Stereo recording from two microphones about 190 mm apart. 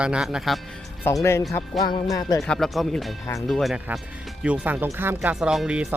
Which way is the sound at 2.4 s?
Centre (ahead or behind).